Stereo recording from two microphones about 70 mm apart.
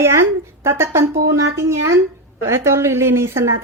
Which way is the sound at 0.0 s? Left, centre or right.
Right.